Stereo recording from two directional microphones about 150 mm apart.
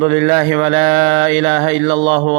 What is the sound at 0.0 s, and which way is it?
Mantra, 40° right (ahead or behind).